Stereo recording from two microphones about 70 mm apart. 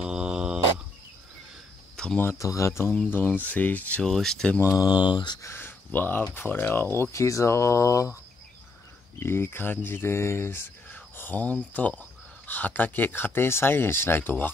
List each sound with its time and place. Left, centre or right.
0.0 s a sound: centre
2.0 s a sound: centre
2.3 s speech: left
2.9 s speech: left
4.0 s speech: centre
4.8 s speech: left
5.4 s speech: left
9.2 s speech: left